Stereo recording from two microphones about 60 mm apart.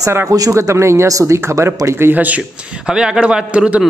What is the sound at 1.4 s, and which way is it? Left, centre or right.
Speech, right.